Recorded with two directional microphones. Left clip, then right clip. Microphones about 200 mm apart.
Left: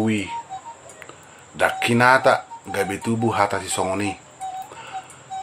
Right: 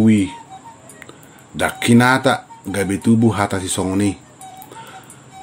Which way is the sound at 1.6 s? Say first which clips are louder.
Right 2 dB; 35° right (ahead or behind).